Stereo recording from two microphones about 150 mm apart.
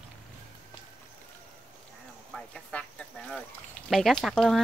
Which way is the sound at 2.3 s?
5° left (ahead or behind).